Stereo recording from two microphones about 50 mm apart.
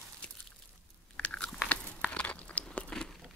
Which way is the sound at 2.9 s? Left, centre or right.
Centre.